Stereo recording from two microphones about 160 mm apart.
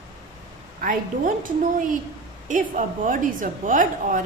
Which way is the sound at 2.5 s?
55° right (ahead or behind).